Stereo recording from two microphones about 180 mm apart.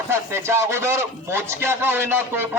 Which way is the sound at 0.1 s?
15° right (ahead or behind).